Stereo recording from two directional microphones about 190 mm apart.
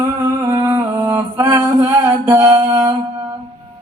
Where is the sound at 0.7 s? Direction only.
15° right (ahead or behind).